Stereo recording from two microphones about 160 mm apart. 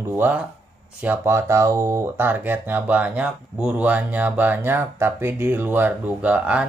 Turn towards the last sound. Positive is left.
turn(degrees=-10)  # may be behind; listen again after turning